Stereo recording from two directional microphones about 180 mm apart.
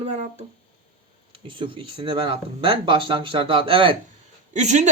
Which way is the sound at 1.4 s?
30° right (ahead or behind).